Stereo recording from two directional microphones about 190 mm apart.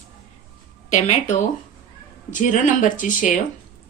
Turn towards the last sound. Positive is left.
turn(degrees=40)  # may be behind; listen again after turning